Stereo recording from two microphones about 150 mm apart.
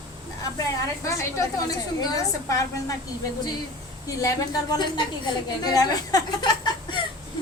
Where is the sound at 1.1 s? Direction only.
20° left (ahead or behind).